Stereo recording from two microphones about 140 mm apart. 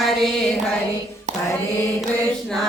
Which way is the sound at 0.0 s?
Centre (ahead or behind).